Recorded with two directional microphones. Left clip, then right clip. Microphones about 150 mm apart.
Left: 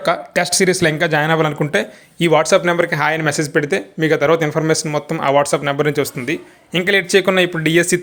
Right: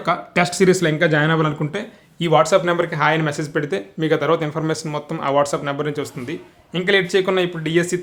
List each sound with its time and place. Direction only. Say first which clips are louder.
0.0 s speech: left 2 dB; 25° left (ahead or behind)